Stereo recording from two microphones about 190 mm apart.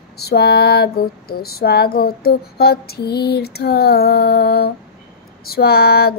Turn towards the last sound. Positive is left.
turn(degrees=55)  # may be behind; listen again after turning